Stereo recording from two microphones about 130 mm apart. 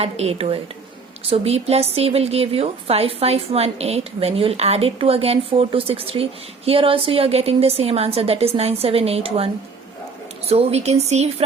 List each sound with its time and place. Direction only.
0.0 s a woman's voice: 50° right (ahead or behind)
10.5 s speech: 50° right (ahead or behind)